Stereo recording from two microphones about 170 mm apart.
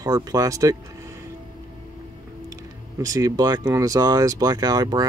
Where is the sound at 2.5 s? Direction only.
20° right (ahead or behind).